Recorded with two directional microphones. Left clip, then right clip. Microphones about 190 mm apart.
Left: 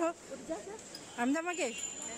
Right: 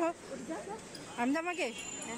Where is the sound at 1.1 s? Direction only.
25° left (ahead or behind).